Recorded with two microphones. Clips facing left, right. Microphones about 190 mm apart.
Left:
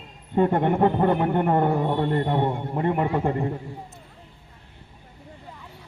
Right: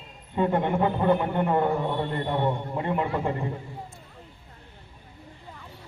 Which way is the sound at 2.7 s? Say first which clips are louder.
Left 4 dB; 50° left (ahead or behind).